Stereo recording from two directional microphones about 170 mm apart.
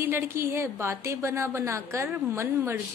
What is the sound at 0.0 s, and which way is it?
A woman's voice, 15° right (ahead or behind).